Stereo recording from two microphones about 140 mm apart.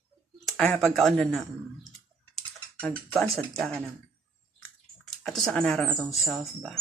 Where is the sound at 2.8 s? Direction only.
10° left (ahead or behind).